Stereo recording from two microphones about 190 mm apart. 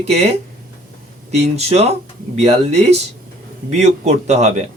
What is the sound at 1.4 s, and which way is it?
Speech, 35° right (ahead or behind).